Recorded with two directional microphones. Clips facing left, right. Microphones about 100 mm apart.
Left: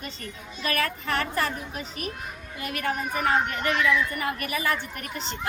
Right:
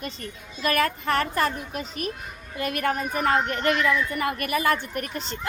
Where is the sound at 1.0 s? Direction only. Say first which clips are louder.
Right 3 dB; 45° right (ahead or behind).